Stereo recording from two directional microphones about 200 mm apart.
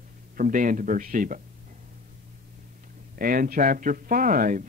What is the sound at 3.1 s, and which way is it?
A man's voice, 45° right (ahead or behind).